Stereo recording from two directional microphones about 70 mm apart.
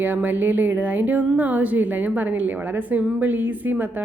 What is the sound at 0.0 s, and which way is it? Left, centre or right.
Speech, right.